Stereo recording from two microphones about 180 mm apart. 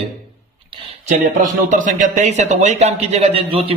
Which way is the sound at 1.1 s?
45° right (ahead or behind).